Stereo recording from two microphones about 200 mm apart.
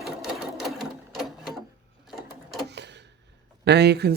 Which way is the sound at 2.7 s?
60° right (ahead or behind).